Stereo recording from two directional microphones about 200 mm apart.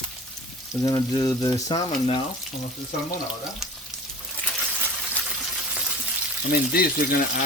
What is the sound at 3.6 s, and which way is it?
Frying, centre (ahead or behind).